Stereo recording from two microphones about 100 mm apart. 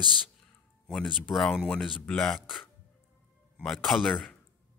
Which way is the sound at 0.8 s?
5° left (ahead or behind).